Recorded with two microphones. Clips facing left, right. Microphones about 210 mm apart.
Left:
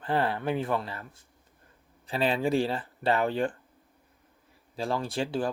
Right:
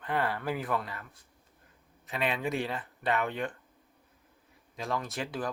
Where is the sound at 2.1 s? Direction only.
30° left (ahead or behind).